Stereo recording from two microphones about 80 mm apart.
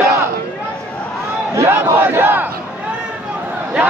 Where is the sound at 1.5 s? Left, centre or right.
Right.